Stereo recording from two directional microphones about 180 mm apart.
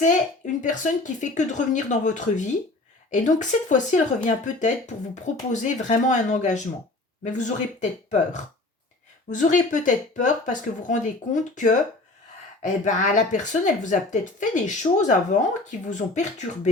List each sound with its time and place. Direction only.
0.0 s speech: 45° left (ahead or behind)